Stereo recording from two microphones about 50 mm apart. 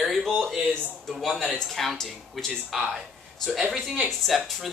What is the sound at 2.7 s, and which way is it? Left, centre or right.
Speech, centre.